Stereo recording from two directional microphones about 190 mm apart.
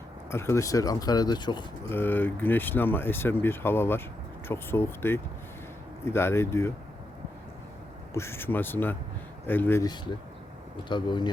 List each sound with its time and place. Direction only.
0.3 s speech: 15° left (ahead or behind)
1.9 s speech: 10° left (ahead or behind)
8.1 s speech: 15° left (ahead or behind)